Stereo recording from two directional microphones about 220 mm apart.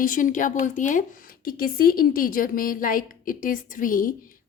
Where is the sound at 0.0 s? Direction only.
35° left (ahead or behind).